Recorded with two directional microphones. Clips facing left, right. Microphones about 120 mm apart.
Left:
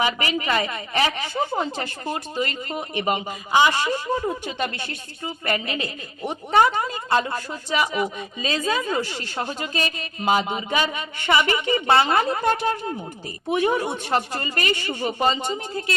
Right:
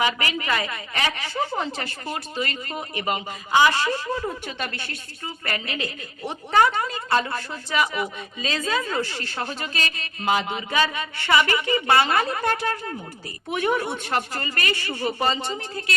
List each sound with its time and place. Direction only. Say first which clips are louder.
0.0 s speech: left 1 dB; 25° left (ahead or behind)